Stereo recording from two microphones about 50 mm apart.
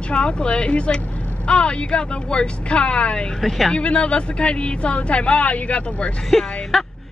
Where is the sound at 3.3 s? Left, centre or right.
Centre.